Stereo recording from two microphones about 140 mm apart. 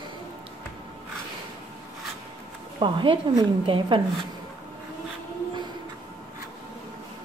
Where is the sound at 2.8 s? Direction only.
35° right (ahead or behind).